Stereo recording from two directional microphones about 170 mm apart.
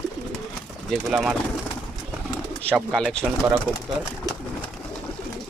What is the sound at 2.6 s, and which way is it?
Speech, 5° left (ahead or behind).